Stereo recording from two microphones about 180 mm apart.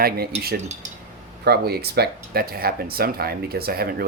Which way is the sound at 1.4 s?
60° right (ahead or behind).